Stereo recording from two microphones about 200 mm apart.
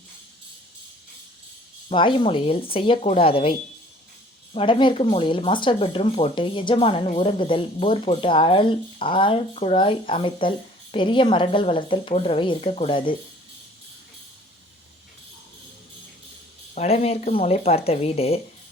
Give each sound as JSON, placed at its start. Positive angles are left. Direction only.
{"t": 1.9, "sound": "speech", "side_deg": 25}
{"t": 4.5, "sound": "speech", "side_deg": 25}
{"t": 16.7, "sound": "speech", "side_deg": 30}